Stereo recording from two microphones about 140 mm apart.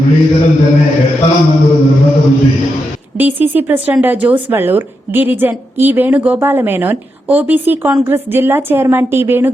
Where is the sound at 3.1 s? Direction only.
15° right (ahead or behind).